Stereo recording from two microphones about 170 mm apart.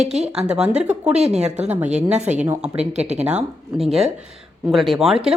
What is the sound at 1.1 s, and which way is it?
Speech, 40° right (ahead or behind).